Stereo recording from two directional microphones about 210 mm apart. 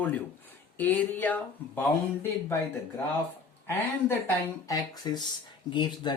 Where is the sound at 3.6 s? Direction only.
15° left (ahead or behind).